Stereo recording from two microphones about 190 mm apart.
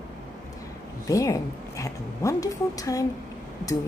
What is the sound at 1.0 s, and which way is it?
A woman's voice, 15° left (ahead or behind).